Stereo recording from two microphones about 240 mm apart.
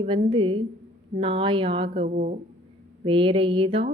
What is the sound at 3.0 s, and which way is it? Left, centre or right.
Speech, right.